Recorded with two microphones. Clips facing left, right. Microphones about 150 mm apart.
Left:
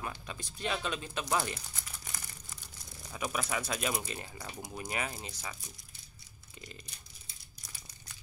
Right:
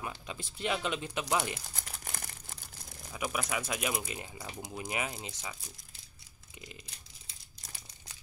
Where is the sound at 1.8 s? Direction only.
55° right (ahead or behind).